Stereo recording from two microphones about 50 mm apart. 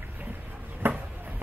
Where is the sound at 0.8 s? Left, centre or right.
Right.